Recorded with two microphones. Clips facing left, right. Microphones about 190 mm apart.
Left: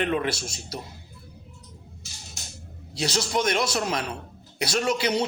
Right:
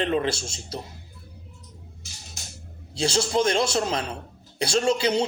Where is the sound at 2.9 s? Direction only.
30° right (ahead or behind).